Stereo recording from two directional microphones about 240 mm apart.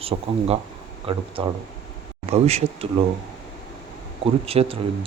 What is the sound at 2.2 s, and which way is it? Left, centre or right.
Speech, right.